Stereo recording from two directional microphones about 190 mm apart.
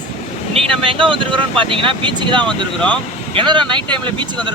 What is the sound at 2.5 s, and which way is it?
Speech, 5° left (ahead or behind).